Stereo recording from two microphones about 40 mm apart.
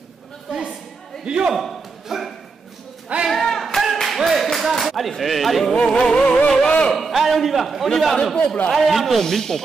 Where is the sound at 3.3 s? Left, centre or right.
Centre.